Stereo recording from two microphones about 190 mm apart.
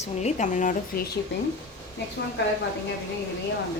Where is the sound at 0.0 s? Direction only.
35° left (ahead or behind).